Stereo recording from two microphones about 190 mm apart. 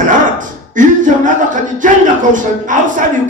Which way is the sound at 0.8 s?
40° right (ahead or behind).